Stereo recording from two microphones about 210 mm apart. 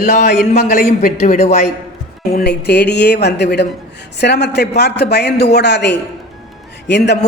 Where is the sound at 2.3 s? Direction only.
50° left (ahead or behind).